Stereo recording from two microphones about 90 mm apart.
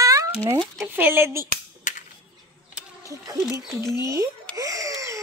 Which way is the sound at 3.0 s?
40° right (ahead or behind).